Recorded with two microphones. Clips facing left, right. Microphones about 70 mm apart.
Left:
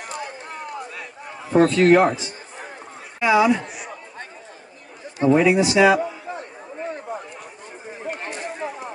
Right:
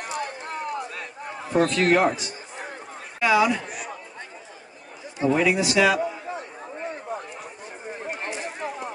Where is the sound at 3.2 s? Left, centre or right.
Centre.